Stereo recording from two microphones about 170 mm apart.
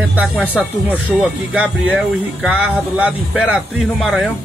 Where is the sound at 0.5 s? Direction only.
10° right (ahead or behind).